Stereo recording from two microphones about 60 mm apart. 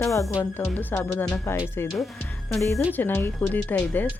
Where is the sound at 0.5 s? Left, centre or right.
Left.